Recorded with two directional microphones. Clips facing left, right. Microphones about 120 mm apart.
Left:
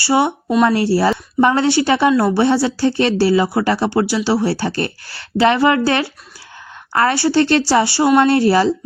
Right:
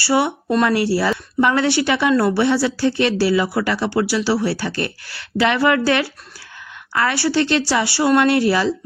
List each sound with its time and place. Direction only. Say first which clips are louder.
0.0 s speech: left 2 dB; 25° left (ahead or behind)
6.9 s speech: left 4 dB; 40° left (ahead or behind)